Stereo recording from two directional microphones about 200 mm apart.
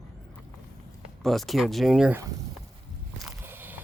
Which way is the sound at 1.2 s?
Centre (ahead or behind).